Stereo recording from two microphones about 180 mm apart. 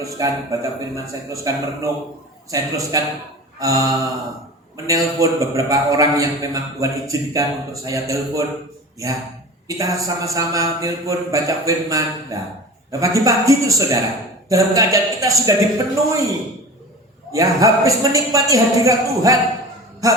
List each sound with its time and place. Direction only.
0.2 s a man's voice: 20° right (ahead or behind)
9.6 s a man's voice: 20° right (ahead or behind)
17.3 s a man's voice: 20° right (ahead or behind)